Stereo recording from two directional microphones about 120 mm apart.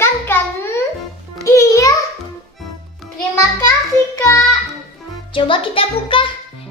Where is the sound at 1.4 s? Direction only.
25° left (ahead or behind).